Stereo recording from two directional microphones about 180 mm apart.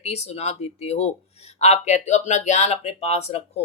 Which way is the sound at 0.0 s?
35° left (ahead or behind).